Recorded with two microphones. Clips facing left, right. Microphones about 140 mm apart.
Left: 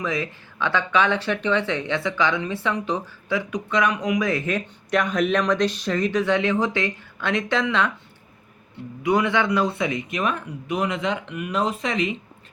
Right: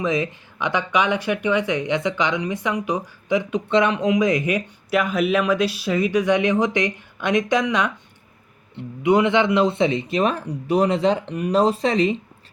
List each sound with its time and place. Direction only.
0.0 s speech: 20° right (ahead or behind)